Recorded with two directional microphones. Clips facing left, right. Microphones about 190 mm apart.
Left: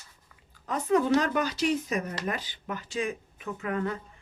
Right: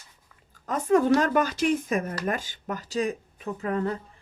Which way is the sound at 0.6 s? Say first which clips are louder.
Right 3 dB; 45° right (ahead or behind).